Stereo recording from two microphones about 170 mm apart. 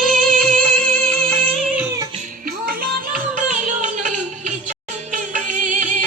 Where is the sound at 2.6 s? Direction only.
65° right (ahead or behind).